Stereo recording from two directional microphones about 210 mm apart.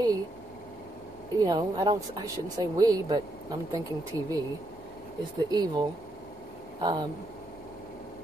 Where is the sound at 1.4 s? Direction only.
20° right (ahead or behind).